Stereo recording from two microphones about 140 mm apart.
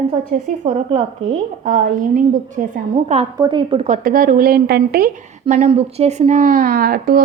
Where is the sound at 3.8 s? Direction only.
85° right.